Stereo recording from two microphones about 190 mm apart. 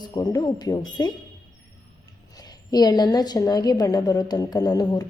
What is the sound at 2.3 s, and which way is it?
A woman's voice, 20° left (ahead or behind).